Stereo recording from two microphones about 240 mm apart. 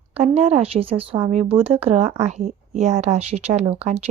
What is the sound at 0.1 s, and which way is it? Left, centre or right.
A woman's voice, right.